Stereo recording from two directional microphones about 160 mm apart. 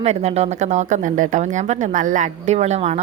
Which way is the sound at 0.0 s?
40° right (ahead or behind).